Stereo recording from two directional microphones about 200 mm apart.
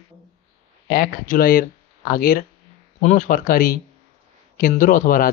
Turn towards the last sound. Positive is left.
turn(degrees=45)  # may be behind; listen again after turning